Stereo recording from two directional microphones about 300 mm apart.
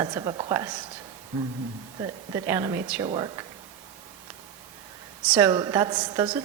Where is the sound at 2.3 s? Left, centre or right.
Centre.